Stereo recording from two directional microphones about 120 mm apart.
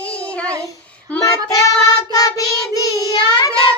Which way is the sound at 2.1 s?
30° left (ahead or behind).